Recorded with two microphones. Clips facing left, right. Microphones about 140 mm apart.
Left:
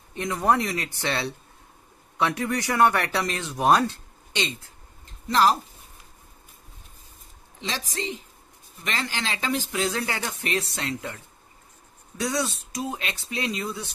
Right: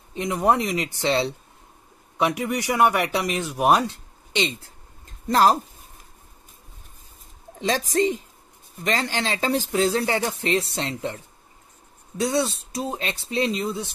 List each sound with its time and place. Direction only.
0.1 s a man's voice: 20° right (ahead or behind)
5.3 s a woman's voice: 45° right (ahead or behind)
7.6 s a woman's voice: 45° right (ahead or behind); by 11.1 s 25° right (ahead or behind)
12.2 s speech: 25° right (ahead or behind)